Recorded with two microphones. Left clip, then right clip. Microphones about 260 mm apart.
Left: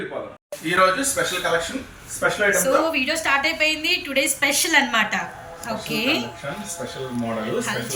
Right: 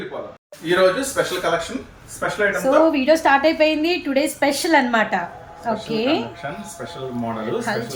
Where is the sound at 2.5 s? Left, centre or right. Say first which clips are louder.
Right 3 dB; right.